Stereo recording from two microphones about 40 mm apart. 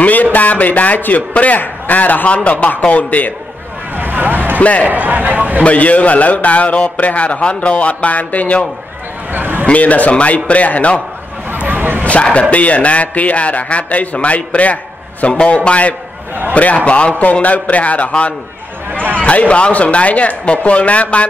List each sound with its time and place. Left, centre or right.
0.0 s a man's voice: left
4.0 s vehicle: right
4.6 s a man's voice: left
4.8 s a man's voice: right
5.6 s a man's voice: left
9.3 s a man's voice: right
9.7 s a man's voice: left
11.5 s a sound: right
12.0 s a man's voice: left